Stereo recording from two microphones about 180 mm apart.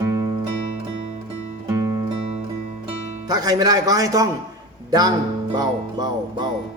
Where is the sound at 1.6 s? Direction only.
15° right (ahead or behind).